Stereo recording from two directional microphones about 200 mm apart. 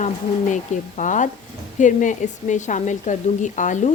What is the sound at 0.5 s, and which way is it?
Speech, 40° left (ahead or behind).